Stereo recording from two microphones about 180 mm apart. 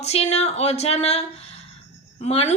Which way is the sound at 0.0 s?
35° left (ahead or behind).